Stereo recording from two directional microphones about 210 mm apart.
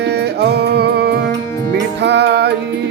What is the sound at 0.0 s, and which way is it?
Music, 50° right (ahead or behind).